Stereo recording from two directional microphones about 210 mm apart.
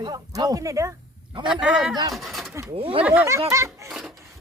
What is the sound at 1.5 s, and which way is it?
Speech, 5° right (ahead or behind).